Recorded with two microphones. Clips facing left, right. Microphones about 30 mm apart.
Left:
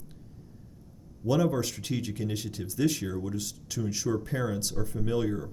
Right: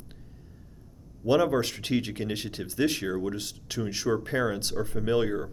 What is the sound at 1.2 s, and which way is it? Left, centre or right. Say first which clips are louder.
Speech: right 3 dB; right.